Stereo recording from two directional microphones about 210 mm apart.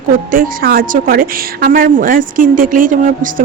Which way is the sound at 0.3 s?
40° right (ahead or behind).